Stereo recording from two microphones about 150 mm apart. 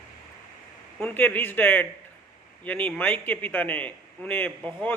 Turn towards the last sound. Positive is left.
turn(degrees=10)  # may be behind; listen again after turning